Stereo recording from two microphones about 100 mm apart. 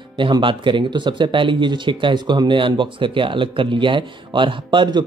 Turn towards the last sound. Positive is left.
turn(degrees=-50)  # may be behind; listen again after turning